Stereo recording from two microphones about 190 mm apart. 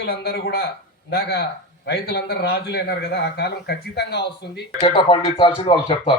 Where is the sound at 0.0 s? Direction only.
55° left (ahead or behind).